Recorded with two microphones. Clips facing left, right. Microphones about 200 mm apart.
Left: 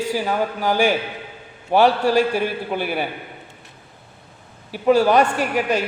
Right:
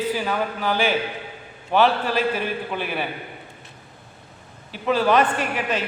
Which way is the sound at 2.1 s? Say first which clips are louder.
Left 5 dB; 40° left (ahead or behind).